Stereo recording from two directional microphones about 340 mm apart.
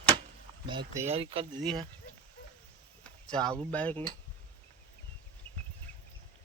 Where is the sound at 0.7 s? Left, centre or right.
Centre.